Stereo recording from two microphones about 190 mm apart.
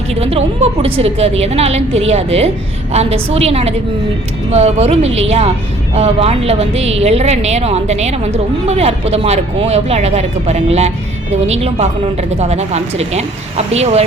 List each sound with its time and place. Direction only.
0.1 s a woman's voice: 30° right (ahead or behind)